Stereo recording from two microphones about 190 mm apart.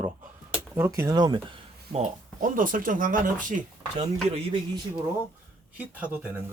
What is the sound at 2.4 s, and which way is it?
Speech, 45° right (ahead or behind).